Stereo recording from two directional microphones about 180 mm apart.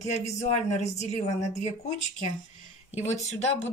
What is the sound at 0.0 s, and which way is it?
Speech, 40° left (ahead or behind).